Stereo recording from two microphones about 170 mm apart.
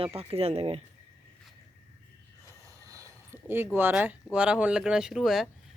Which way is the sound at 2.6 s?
20° right (ahead or behind).